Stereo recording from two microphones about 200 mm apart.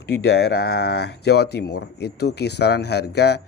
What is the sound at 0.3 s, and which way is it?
Speech, 55° left (ahead or behind).